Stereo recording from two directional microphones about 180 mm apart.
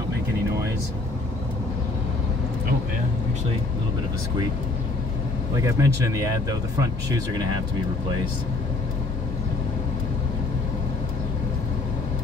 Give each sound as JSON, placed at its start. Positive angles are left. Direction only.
{"t": 5.6, "sound": "speech", "side_deg": -15}